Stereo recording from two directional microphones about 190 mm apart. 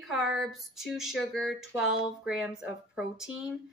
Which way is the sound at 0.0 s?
Centre (ahead or behind).